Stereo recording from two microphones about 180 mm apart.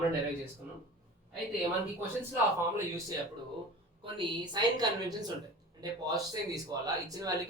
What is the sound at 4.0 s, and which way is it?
Speech, 25° right (ahead or behind).